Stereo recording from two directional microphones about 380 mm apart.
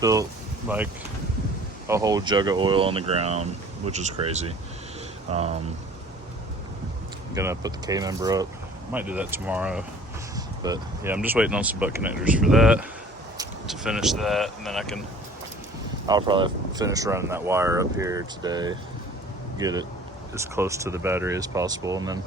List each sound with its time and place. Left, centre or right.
0.0 s speech: centre
1.9 s speech: centre
7.3 s speech: centre
16.0 s speech: centre